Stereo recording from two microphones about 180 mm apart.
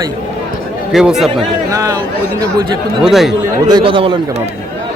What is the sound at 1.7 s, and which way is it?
Speech, 20° right (ahead or behind).